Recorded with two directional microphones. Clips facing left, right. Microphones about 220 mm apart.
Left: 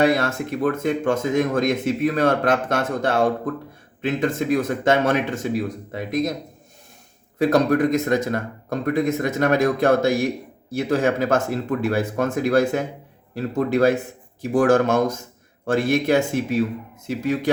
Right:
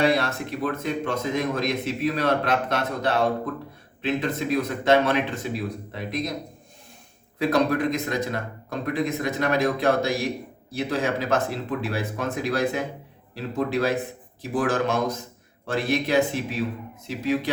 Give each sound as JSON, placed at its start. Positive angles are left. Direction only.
{"t": 0.0, "sound": "speech", "side_deg": 45}
{"t": 7.3, "sound": "speech", "side_deg": 45}